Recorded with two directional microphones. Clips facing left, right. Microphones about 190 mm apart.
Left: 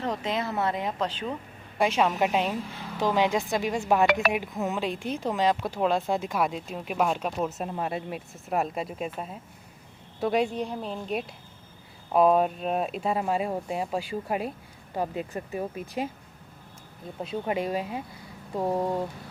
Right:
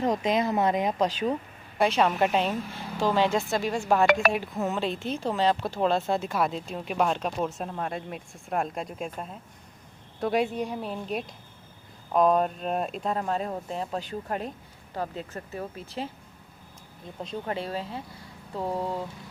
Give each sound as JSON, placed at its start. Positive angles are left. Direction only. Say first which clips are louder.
{"t": 0.0, "sound": "speech", "louder": "right 5 dB", "side_deg": -15}
{"t": 1.8, "sound": "speech", "louder": "right 1 dB", "side_deg": 10}
{"t": 4.0, "sound": "speech", "louder": "right 3 dB", "side_deg": -45}
{"t": 4.6, "sound": "speech", "louder": "right 2 dB", "side_deg": 10}
{"t": 17.2, "sound": "speech", "louder": "left 3 dB", "side_deg": 10}